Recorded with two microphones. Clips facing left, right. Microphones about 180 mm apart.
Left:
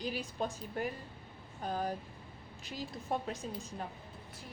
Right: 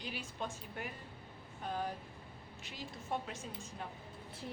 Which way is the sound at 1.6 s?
40° left (ahead or behind).